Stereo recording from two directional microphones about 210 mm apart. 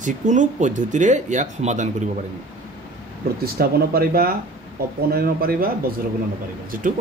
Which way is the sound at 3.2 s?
45° right (ahead or behind).